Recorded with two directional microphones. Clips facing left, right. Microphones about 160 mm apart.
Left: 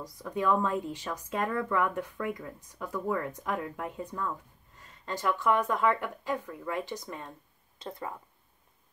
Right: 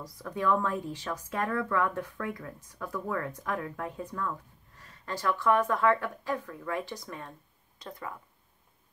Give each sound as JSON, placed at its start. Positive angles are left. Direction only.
{"t": 0.0, "sound": "speech", "side_deg": 20}